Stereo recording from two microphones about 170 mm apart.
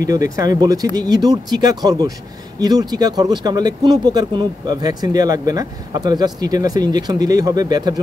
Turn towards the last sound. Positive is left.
turn(degrees=-20)  # may be behind; listen again after turning